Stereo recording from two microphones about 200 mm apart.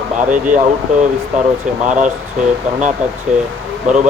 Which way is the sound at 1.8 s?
35° right (ahead or behind).